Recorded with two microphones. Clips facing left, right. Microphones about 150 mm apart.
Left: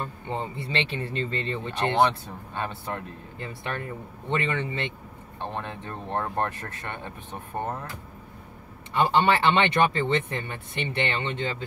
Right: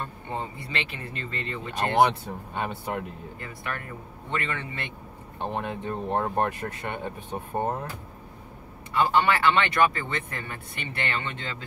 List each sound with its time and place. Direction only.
0.7 s speech: 30° left (ahead or behind)
2.5 s speech: 15° right (ahead or behind)
3.3 s speech: 25° left (ahead or behind)
5.4 s speech: 15° right (ahead or behind)
8.9 s speech: 25° left (ahead or behind)